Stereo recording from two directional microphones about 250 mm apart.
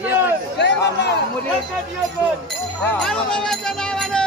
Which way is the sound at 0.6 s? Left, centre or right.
Left.